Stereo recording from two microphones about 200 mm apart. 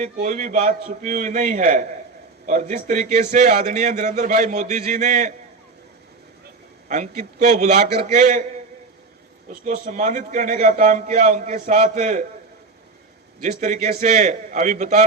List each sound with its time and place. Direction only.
0.0 s a man's voice: 40° right (ahead or behind)
6.8 s a man's voice: 40° right (ahead or behind)
9.5 s a man's voice: 45° right (ahead or behind)
13.4 s a man's voice: 35° right (ahead or behind)